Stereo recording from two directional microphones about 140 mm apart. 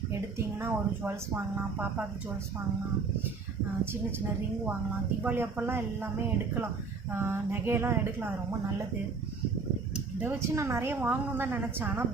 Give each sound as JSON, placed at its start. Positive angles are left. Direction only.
{"t": 0.1, "sound": "a woman's voice", "side_deg": -15}
{"t": 5.2, "sound": "a woman's voice", "side_deg": -15}
{"t": 9.9, "sound": "a woman's voice", "side_deg": -15}